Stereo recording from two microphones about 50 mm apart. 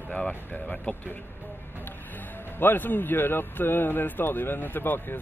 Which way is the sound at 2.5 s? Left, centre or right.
Left.